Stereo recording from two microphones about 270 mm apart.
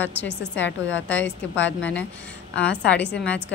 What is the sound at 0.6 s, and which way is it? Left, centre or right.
Speech, left.